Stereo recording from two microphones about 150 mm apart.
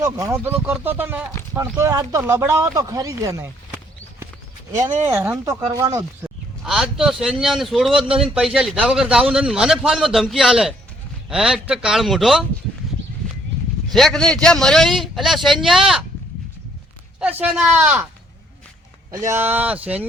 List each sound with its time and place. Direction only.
0.0 s speech: 20° right (ahead or behind)
5.0 s speech: 15° right (ahead or behind)
6.2 s a man's voice: 5° right (ahead or behind)
13.9 s a man's voice: 5° left (ahead or behind)
17.2 s speech: 10° right (ahead or behind)
19.3 s speech: 15° right (ahead or behind)